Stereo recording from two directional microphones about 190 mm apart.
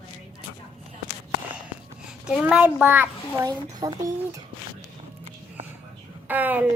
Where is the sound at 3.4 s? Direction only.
20° right (ahead or behind).